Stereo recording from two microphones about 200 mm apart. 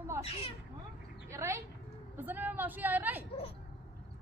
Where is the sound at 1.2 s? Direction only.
15° right (ahead or behind).